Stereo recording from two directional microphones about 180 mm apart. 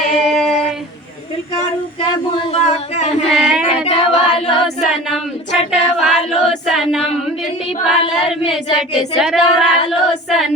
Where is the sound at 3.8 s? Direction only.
35° left (ahead or behind).